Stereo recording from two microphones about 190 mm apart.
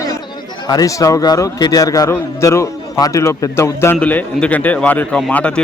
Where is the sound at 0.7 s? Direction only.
20° left (ahead or behind).